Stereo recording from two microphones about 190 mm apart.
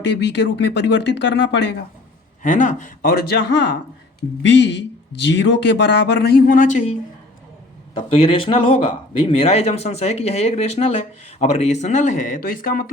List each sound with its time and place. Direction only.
0.0 s speech: 65° left (ahead or behind)
2.4 s speech: 45° left (ahead or behind)
7.9 s a man's voice: 30° left (ahead or behind); by 12.8 s 50° left (ahead or behind)